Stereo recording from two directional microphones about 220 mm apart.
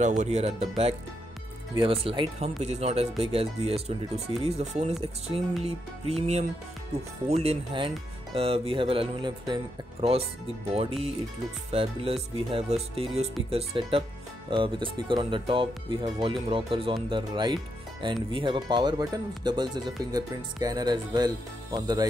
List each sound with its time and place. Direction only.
0.0 s speech: 35° right (ahead or behind)
7.2 s speech: 30° right (ahead or behind)